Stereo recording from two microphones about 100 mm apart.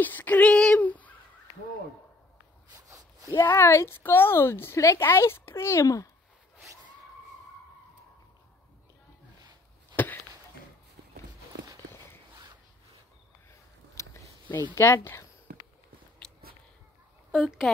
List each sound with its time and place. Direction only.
0.0 s speech: 20° left (ahead or behind)
2.9 s zipper: 30° right (ahead or behind)
3.3 s a woman's voice: 25° left (ahead or behind)
9.9 s chop: 20° left (ahead or behind)
13.5 s a sound: 30° left (ahead or behind)
14.8 s a woman's voice: 25° left (ahead or behind)
16.2 s biting: 5° left (ahead or behind)